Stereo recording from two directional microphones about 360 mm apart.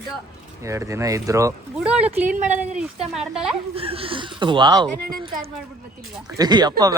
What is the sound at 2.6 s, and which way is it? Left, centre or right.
Speech, centre.